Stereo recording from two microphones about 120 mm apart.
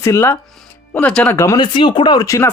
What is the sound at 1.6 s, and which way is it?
Speech, 40° left (ahead or behind).